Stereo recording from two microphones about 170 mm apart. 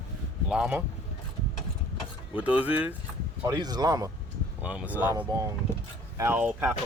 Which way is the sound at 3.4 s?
25° right (ahead or behind).